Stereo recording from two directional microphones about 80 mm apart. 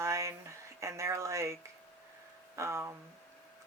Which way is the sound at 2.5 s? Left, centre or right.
Right.